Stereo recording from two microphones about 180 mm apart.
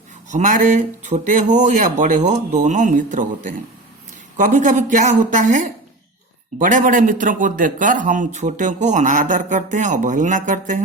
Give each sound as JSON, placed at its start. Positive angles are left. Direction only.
{"t": 0.3, "sound": "a man's voice", "side_deg": -45}